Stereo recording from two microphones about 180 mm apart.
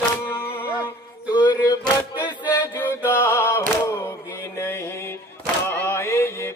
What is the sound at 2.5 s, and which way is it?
Music, 15° left (ahead or behind).